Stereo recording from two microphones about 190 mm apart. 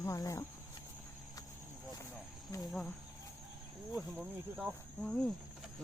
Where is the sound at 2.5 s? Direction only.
15° left (ahead or behind).